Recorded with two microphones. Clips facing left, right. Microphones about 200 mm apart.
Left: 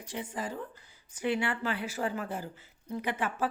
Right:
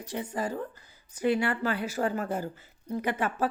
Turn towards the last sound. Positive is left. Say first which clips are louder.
# right 3 dB
turn(degrees=-40)  # may be behind; listen again after turning